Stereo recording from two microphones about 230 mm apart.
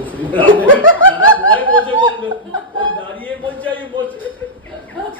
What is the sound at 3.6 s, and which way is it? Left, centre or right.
Speech, centre.